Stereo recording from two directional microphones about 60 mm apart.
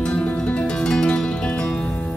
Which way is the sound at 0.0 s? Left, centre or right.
Left.